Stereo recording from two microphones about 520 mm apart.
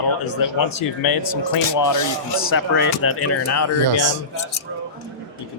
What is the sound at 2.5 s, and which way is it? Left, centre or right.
Speech, left.